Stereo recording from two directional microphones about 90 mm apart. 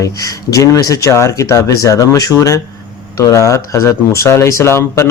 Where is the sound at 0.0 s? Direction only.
40° left (ahead or behind).